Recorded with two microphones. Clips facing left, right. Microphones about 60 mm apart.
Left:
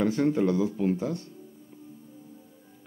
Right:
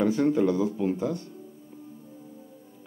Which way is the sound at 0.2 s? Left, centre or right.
Centre.